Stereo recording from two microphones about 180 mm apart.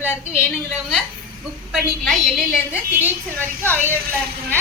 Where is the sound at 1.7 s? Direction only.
Centre (ahead or behind).